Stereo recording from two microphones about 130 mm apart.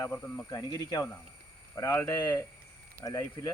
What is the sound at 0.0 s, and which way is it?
Speech, 15° left (ahead or behind).